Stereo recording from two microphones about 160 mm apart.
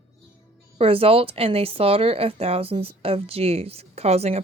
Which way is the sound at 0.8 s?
35° right (ahead or behind).